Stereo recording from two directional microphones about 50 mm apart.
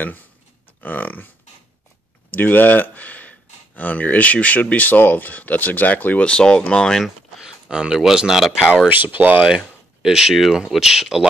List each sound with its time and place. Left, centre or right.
0.8 s speech: left
2.3 s speech: left
6.3 s speech: centre
7.4 s speech: centre
8.8 s speech: right
10.0 s speech: centre